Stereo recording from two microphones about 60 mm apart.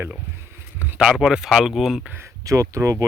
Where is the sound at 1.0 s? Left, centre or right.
Centre.